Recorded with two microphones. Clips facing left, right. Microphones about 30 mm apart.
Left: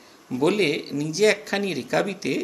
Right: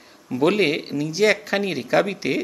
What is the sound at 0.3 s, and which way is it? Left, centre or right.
A man's voice, centre.